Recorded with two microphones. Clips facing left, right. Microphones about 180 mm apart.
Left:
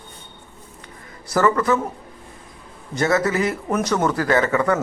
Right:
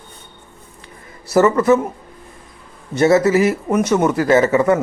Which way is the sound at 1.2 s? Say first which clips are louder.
Right 5 dB; 25° right (ahead or behind).